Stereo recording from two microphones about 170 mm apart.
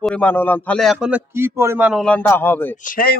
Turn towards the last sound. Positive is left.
turn(degrees=55)  # may be behind; listen again after turning